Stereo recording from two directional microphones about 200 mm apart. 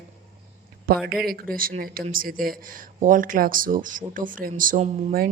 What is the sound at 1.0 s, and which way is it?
Speech, centre (ahead or behind).